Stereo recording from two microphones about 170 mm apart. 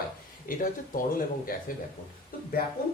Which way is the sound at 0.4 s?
55° left (ahead or behind).